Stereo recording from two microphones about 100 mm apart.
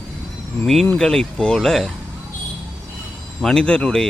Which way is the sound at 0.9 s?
5° left (ahead or behind).